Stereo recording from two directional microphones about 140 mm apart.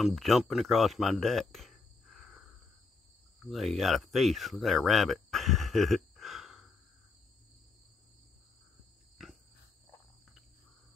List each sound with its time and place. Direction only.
0.0 s speech: centre (ahead or behind)